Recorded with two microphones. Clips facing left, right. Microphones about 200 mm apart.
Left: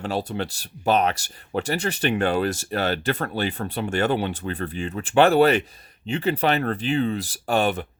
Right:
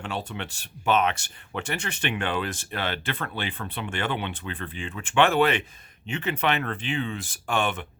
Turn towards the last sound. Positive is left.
turn(degrees=35)  # may be behind; listen again after turning